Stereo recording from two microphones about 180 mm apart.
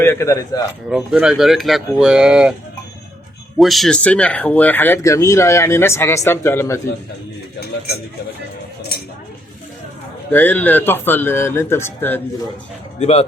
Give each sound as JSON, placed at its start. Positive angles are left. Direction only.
{"t": 0.0, "sound": "speech", "side_deg": 15}
{"t": 0.9, "sound": "speech", "side_deg": -5}
{"t": 3.6, "sound": "speech", "side_deg": 0}
{"t": 7.6, "sound": "speech", "side_deg": 60}
{"t": 10.3, "sound": "speech", "side_deg": 10}
{"t": 13.0, "sound": "speech", "side_deg": 35}